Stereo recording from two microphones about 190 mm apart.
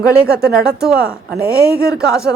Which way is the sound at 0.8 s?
5° right (ahead or behind).